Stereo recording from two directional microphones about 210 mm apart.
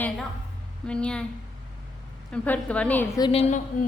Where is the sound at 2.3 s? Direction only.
5° left (ahead or behind).